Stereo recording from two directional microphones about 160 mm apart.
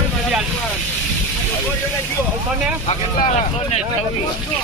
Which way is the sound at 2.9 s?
40° left (ahead or behind).